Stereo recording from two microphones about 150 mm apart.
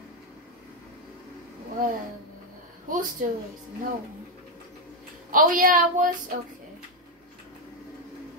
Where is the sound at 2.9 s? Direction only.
60° right (ahead or behind).